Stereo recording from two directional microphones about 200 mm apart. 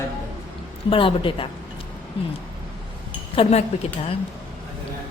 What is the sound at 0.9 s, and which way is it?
Speech, 25° left (ahead or behind).